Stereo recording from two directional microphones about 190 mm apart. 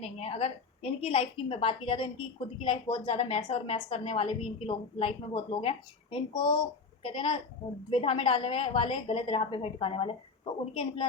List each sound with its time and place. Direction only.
0.0 s a woman's voice: 30° left (ahead or behind)